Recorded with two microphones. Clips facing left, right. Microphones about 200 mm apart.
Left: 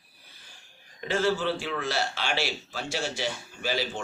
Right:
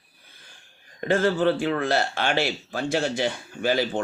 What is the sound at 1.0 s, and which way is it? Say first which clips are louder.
A man's voice: right 5 dB; 55° right (ahead or behind).